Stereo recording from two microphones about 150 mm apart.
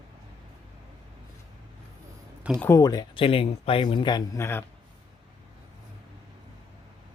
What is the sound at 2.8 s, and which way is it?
Speech, 25° left (ahead or behind).